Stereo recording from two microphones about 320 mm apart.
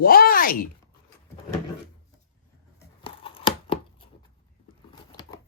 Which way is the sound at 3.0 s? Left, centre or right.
Centre.